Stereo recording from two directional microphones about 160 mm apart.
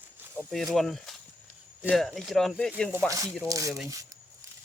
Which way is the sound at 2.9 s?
20° right (ahead or behind).